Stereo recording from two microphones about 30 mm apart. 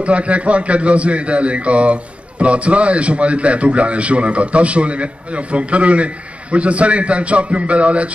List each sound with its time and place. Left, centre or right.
0.0 s a man's voice: right